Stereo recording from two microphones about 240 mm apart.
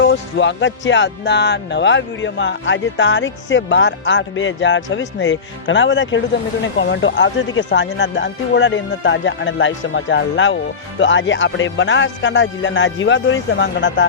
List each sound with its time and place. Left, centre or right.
0.0 s speech: left